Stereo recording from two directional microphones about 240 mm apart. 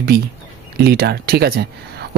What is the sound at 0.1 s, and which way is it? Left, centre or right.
Speech, right.